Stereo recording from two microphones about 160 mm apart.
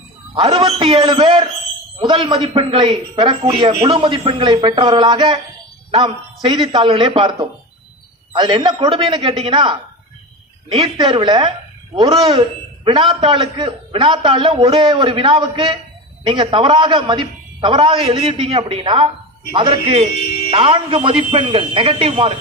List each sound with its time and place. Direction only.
0.3 s a man's voice: 35° right (ahead or behind)